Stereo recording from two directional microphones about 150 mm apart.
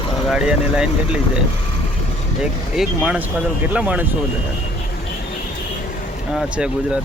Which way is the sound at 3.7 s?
10° right (ahead or behind).